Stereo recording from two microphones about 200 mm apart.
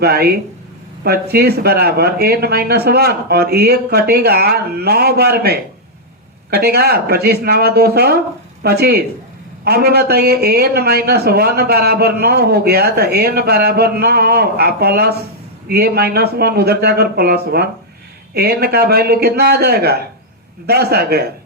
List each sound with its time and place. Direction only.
0.0 s a man's voice: 50° right (ahead or behind)